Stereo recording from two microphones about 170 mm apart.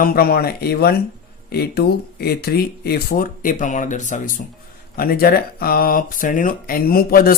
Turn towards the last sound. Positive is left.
turn(degrees=60)  # may be behind; listen again after turning